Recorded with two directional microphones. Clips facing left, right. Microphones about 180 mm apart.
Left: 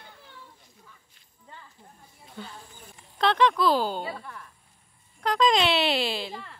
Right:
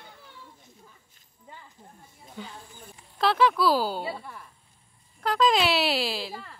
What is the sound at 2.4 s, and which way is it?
Speech, 10° right (ahead or behind).